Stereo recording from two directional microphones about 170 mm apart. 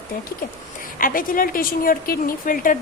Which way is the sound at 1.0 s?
55° left (ahead or behind).